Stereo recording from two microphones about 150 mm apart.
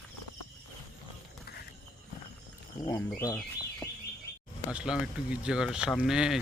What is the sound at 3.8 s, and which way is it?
Chirp, 15° left (ahead or behind).